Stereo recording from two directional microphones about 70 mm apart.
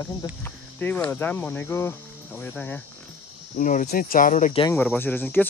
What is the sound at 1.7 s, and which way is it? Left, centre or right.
Speech, left.